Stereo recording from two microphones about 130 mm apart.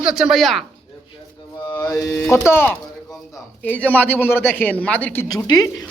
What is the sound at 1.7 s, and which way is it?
Mantra, 30° left (ahead or behind).